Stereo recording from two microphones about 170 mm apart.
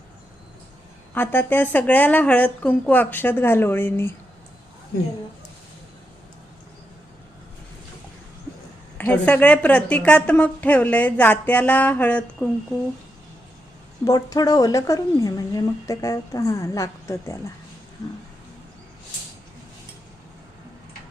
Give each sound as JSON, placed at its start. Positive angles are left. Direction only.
{"t": 1.1, "sound": "a woman's voice", "side_deg": 10}
{"t": 9.0, "sound": "a woman's voice", "side_deg": 10}
{"t": 14.0, "sound": "speech", "side_deg": 20}